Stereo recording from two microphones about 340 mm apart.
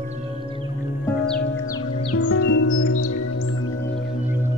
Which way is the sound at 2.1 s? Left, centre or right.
Left.